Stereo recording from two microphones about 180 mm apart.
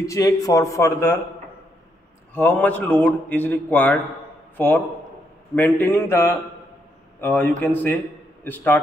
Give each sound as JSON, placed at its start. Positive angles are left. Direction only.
{"t": 0.0, "sound": "a man's voice", "side_deg": 20}
{"t": 2.3, "sound": "a man's voice", "side_deg": 10}